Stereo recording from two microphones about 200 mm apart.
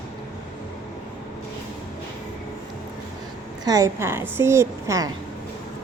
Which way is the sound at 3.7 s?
15° right (ahead or behind).